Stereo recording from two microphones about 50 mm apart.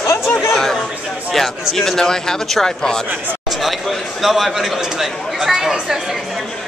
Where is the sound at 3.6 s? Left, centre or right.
Centre.